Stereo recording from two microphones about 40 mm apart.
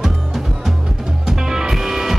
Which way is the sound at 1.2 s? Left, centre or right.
Centre.